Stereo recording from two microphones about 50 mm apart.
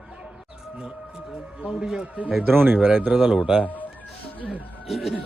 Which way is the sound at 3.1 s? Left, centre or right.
Centre.